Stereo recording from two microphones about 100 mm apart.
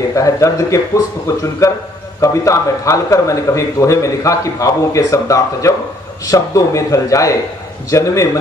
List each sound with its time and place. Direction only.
0.1 s a man's voice: 35° left (ahead or behind)